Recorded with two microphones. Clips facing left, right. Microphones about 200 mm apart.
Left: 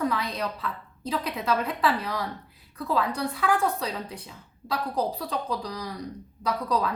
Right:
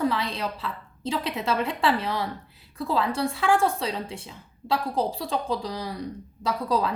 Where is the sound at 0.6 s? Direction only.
30° right (ahead or behind).